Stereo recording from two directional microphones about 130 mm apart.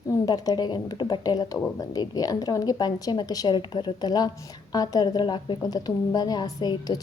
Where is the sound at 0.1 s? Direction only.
30° left (ahead or behind).